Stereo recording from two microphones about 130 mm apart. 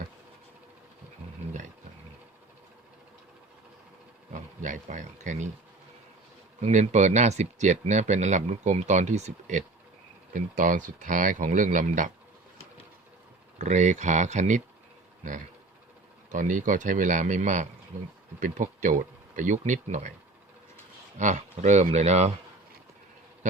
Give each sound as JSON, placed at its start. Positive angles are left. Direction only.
{"t": 4.3, "sound": "speech", "side_deg": -70}
{"t": 6.6, "sound": "speech", "side_deg": -65}
{"t": 10.3, "sound": "speech", "side_deg": -90}
{"t": 13.6, "sound": "speech", "side_deg": -65}
{"t": 16.3, "sound": "speech", "side_deg": -75}
{"t": 18.3, "sound": "speech", "side_deg": -85}
{"t": 21.2, "sound": "speech", "side_deg": -65}